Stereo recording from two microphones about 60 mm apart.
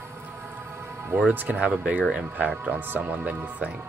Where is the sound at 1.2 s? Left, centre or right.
Right.